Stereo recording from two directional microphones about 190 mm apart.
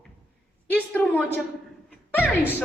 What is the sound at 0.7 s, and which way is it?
A woman's voice, 10° left (ahead or behind).